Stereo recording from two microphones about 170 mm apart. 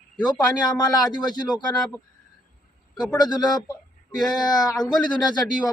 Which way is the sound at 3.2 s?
25° left (ahead or behind).